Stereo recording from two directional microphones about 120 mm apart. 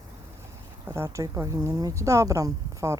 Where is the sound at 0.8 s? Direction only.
25° right (ahead or behind).